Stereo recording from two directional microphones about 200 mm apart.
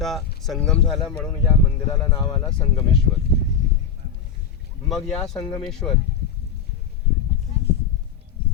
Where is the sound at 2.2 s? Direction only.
20° left (ahead or behind).